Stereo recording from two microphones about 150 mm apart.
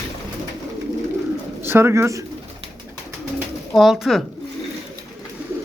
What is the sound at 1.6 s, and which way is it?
Speech, 15° right (ahead or behind).